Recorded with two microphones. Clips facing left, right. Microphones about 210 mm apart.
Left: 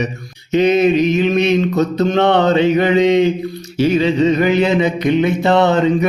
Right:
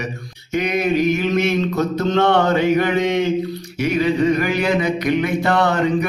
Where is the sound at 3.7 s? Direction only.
30° left (ahead or behind).